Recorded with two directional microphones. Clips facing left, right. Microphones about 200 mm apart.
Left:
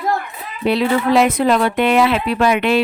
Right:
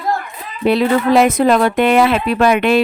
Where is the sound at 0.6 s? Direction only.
50° right (ahead or behind).